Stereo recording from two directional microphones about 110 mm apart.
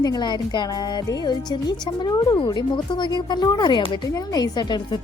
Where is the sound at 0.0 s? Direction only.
40° left (ahead or behind).